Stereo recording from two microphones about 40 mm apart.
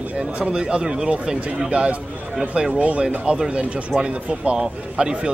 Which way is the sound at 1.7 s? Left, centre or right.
Right.